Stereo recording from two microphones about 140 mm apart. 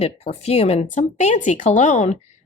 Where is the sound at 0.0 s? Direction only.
50° left (ahead or behind).